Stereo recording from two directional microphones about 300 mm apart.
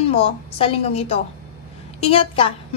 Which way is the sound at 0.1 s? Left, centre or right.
Centre.